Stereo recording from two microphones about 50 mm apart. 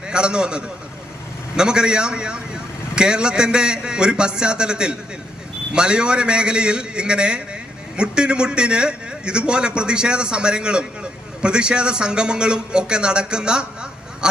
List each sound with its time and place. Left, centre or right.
0.1 s a man's voice: centre